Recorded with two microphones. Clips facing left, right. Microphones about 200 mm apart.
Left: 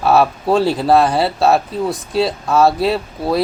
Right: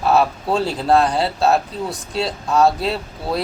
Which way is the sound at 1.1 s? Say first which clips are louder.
Left 3 dB; 65° left (ahead or behind).